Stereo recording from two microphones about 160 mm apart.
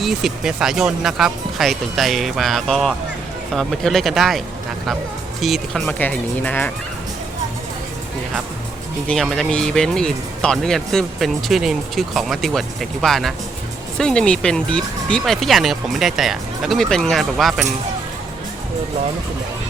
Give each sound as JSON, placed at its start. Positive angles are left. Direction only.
{"t": 0.0, "sound": "speech", "side_deg": 0}
{"t": 9.0, "sound": "speech", "side_deg": 0}